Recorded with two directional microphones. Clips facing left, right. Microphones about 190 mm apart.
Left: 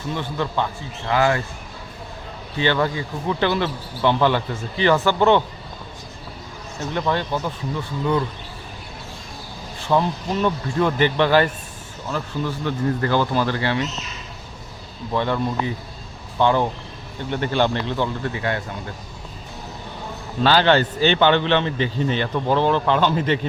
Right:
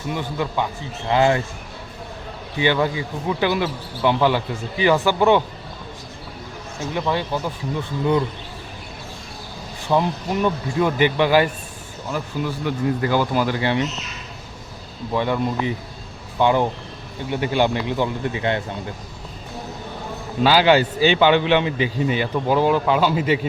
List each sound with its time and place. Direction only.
0.1 s a man's voice: 10° right (ahead or behind)
1.0 s speech: 25° right (ahead or behind)
2.6 s a man's voice: 15° right (ahead or behind)
6.7 s a man's voice: 10° right (ahead or behind)
9.9 s a man's voice: 10° right (ahead or behind)
15.1 s a man's voice: 15° right (ahead or behind)
20.4 s a man's voice: 10° right (ahead or behind)